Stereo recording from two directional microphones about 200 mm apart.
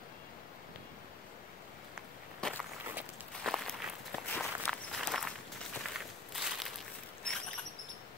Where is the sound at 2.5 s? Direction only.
10° right (ahead or behind).